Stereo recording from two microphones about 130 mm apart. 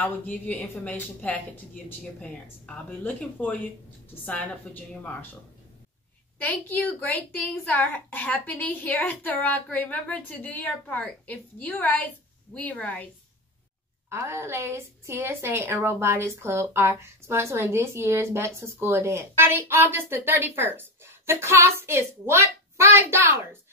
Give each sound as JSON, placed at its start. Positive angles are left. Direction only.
{"t": 0.0, "sound": "a woman's voice", "side_deg": 10}
{"t": 14.0, "sound": "a woman's voice", "side_deg": -20}